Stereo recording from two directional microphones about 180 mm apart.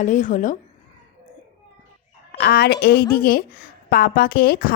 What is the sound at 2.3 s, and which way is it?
A woman's voice, 65° left (ahead or behind).